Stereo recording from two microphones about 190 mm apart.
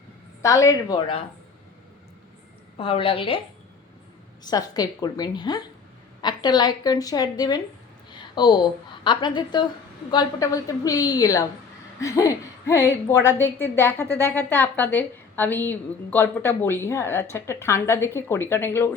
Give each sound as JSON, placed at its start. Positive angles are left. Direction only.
{"t": 0.4, "sound": "a woman's voice", "side_deg": 15}
{"t": 2.7, "sound": "a woman's voice", "side_deg": 30}
{"t": 4.4, "sound": "a woman's voice", "side_deg": 20}